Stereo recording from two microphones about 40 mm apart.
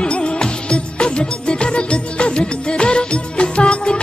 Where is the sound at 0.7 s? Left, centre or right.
Left.